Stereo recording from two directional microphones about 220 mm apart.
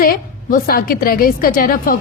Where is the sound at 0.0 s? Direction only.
40° left (ahead or behind).